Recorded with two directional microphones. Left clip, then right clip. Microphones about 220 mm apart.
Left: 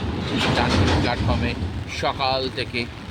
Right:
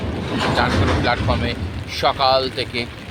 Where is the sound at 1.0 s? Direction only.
10° left (ahead or behind).